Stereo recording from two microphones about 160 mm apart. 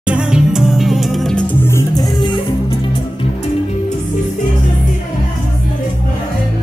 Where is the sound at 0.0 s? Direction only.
5° right (ahead or behind).